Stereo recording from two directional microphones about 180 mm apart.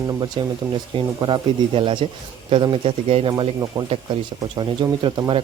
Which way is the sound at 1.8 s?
30° right (ahead or behind).